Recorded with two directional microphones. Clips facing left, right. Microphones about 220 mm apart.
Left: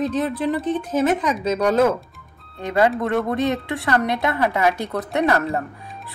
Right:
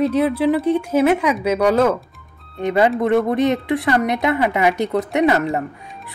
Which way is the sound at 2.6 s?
20° right (ahead or behind).